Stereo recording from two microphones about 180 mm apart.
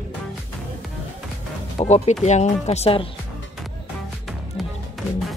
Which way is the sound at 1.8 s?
35° left (ahead or behind).